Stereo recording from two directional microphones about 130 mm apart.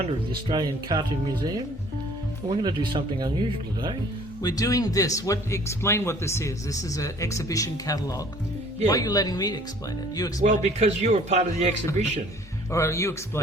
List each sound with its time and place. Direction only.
0.4 s speech: 35° right (ahead or behind)
4.4 s speech: 25° left (ahead or behind)
10.4 s speech: 60° right (ahead or behind)
12.7 s speech: 20° left (ahead or behind)